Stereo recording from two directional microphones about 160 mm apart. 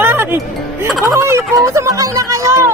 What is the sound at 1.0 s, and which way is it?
Music, 15° right (ahead or behind).